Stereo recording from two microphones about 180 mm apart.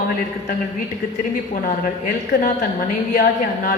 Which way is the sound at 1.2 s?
50° left (ahead or behind).